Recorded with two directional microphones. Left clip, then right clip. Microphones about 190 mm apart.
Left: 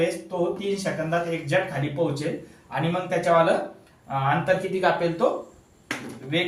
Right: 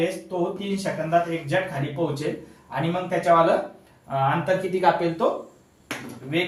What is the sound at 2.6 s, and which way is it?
Speech, 10° right (ahead or behind).